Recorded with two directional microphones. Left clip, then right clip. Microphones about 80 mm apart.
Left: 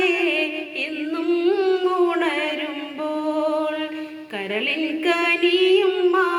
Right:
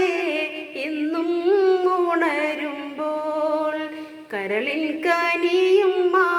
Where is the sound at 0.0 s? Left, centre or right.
Left.